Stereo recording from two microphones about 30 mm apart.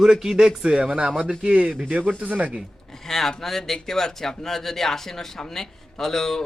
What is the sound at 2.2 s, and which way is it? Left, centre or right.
Speech, right.